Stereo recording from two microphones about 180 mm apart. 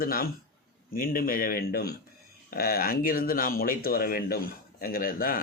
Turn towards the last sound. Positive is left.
turn(degrees=55)  # may be behind; listen again after turning